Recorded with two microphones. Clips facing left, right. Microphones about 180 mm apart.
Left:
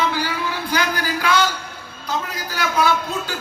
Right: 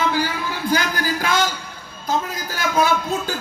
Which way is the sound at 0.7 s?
45° right (ahead or behind).